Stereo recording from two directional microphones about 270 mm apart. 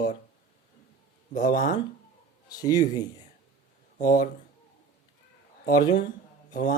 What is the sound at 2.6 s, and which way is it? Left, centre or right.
Speech, centre.